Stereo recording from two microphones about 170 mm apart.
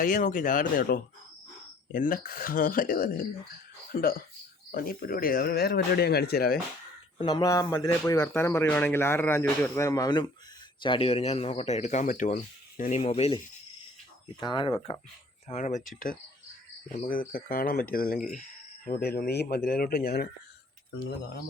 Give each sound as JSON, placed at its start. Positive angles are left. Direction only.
{"t": 0.0, "sound": "speech", "side_deg": 50}
{"t": 7.2, "sound": "a man's voice", "side_deg": 25}
{"t": 13.0, "sound": "a man's voice", "side_deg": 35}
{"t": 15.4, "sound": "speech", "side_deg": 45}
{"t": 18.9, "sound": "speech", "side_deg": 65}